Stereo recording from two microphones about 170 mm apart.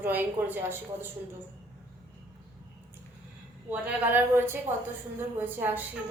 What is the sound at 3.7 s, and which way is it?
A woman's voice, 10° right (ahead or behind).